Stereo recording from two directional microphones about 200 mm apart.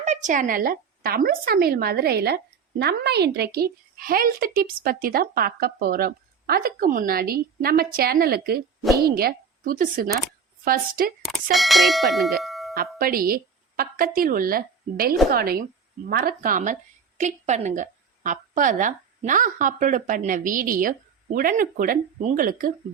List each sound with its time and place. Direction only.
0.0 s a woman's voice: 35° right (ahead or behind)
11.5 s speech: centre (ahead or behind)
12.7 s a woman's voice: 45° right (ahead or behind)